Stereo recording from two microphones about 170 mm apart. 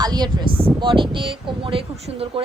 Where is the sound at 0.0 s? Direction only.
25° right (ahead or behind).